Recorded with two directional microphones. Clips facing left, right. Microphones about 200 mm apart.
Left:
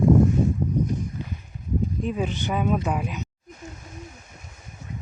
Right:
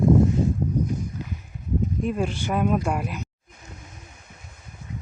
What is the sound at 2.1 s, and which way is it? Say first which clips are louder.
Speech: right 1 dB; 5° right (ahead or behind).